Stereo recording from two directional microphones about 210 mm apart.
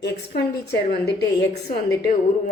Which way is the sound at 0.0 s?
50° left (ahead or behind).